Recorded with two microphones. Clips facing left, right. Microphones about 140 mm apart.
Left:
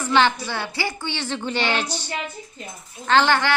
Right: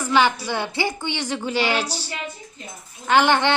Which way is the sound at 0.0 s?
10° right (ahead or behind).